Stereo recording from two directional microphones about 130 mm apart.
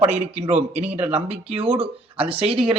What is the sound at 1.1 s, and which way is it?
Speech, 50° right (ahead or behind).